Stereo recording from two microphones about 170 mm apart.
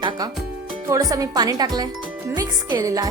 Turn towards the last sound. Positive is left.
turn(degrees=-20)  # may be behind; listen again after turning